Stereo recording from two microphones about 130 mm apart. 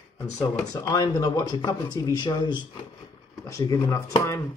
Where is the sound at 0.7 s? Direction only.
30° left (ahead or behind).